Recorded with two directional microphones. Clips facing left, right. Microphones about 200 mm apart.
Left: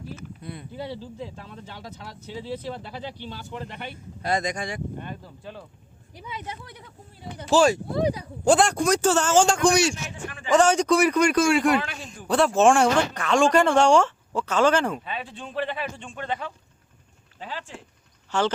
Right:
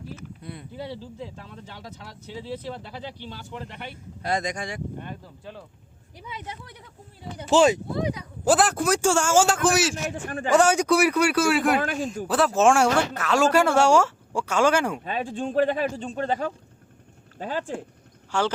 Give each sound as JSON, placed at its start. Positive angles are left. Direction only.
{"t": 4.3, "sound": "speech", "side_deg": 25}
{"t": 7.5, "sound": "speech", "side_deg": -20}
{"t": 7.9, "sound": "speech", "side_deg": 35}
{"t": 8.4, "sound": "a man's voice", "side_deg": -5}
{"t": 9.9, "sound": "speech", "side_deg": -45}
{"t": 10.5, "sound": "speech", "side_deg": -10}
{"t": 11.8, "sound": "speech", "side_deg": -45}
{"t": 12.3, "sound": "speech", "side_deg": -5}
{"t": 15.0, "sound": "speech", "side_deg": -45}
{"t": 18.3, "sound": "speech", "side_deg": -10}